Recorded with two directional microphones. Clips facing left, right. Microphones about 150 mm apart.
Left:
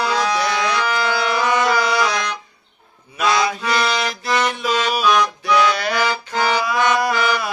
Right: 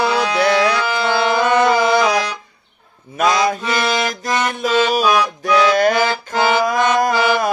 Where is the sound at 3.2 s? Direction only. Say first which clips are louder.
Right 3 dB; 50° right (ahead or behind).